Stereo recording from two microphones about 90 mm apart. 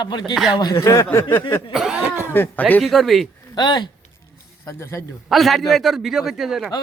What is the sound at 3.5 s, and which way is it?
Speech, 55° left (ahead or behind).